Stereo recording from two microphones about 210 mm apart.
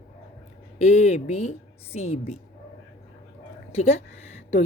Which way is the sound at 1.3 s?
30° left (ahead or behind).